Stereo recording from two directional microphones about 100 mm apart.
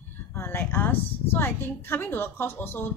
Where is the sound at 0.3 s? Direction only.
25° left (ahead or behind).